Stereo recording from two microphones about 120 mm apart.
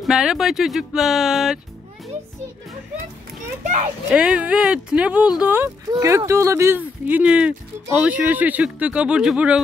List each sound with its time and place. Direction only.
0.0 s speech: 5° right (ahead or behind)
3.6 s speech: 90° right
4.1 s speech: 10° right (ahead or behind)
5.9 s speech: 25° right (ahead or behind); by 9.6 s 10° right (ahead or behind)